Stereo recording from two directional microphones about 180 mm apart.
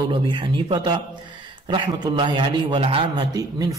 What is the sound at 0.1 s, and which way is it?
A man's voice, 25° right (ahead or behind).